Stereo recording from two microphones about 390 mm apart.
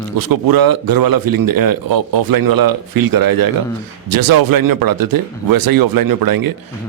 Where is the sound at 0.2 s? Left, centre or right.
Right.